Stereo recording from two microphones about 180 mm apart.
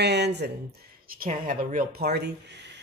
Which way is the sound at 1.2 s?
50° right (ahead or behind).